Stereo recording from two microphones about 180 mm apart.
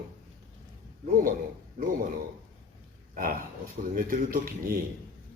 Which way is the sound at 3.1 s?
50° right (ahead or behind).